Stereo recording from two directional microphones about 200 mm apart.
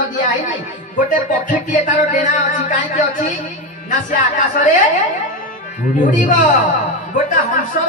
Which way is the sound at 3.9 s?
40° left (ahead or behind).